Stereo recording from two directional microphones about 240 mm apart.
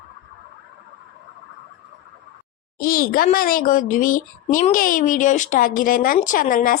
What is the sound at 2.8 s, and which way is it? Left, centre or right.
A child's voice, left.